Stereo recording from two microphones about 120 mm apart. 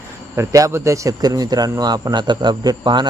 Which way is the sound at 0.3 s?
25° right (ahead or behind).